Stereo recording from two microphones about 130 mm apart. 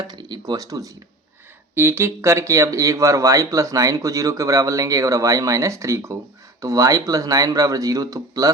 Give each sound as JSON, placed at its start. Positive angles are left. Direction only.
{"t": 0.0, "sound": "speech", "side_deg": -30}
{"t": 1.7, "sound": "speech", "side_deg": -15}